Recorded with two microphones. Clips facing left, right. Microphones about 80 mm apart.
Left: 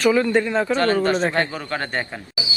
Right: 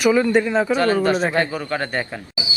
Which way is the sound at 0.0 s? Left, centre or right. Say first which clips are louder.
Right 1 dB; centre.